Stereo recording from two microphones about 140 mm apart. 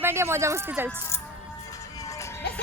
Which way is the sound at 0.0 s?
20° right (ahead or behind).